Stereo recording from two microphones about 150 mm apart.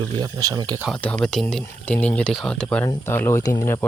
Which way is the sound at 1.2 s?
Centre (ahead or behind).